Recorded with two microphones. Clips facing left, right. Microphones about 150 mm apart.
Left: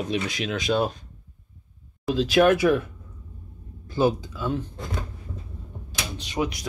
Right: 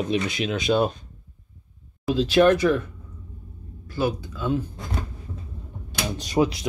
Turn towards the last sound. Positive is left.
turn(degrees=-30)  # may be behind; listen again after turning